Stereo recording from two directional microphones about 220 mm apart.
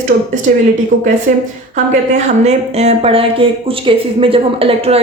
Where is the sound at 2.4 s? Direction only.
30° right (ahead or behind).